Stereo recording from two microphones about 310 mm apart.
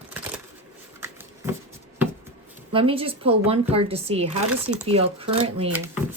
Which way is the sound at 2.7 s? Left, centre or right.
Centre.